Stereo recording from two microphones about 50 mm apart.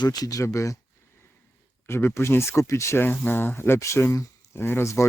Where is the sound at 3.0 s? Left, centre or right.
Left.